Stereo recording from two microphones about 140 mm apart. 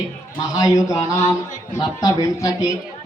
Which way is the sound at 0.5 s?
25° left (ahead or behind).